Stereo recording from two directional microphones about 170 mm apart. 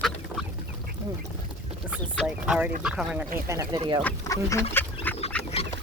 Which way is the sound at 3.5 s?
15° right (ahead or behind).